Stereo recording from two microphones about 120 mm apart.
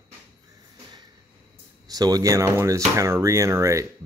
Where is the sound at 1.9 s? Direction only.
30° right (ahead or behind).